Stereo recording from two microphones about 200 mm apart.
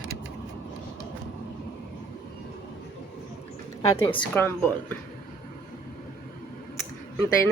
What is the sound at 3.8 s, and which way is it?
A woman's voice, 20° left (ahead or behind).